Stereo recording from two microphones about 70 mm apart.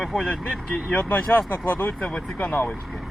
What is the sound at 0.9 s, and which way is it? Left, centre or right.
Speech, left.